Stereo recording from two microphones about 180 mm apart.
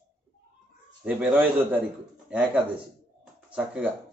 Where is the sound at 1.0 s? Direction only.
5° right (ahead or behind).